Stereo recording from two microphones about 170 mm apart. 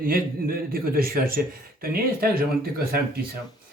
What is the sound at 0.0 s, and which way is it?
Speech, 60° right (ahead or behind).